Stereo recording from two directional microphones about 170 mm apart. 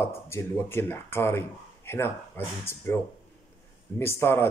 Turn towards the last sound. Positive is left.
turn(degrees=15)  # may be behind; listen again after turning